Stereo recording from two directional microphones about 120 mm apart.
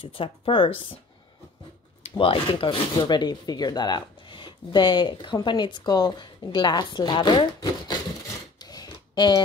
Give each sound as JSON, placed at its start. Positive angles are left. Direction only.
{"t": 0.0, "sound": "speech", "side_deg": 45}
{"t": 2.1, "sound": "speech", "side_deg": 45}
{"t": 8.5, "sound": "a sound", "side_deg": 35}